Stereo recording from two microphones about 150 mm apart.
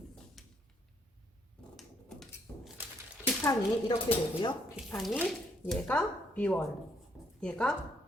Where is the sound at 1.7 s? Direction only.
5° left (ahead or behind).